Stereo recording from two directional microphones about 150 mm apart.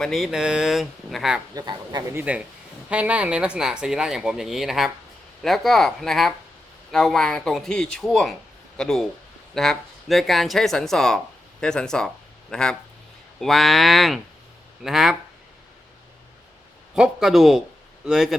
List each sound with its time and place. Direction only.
0.0 s speech: centre (ahead or behind)
1.5 s speech: 25° right (ahead or behind)
2.1 s a man's voice: 10° right (ahead or behind)
16.9 s speech: 5° right (ahead or behind)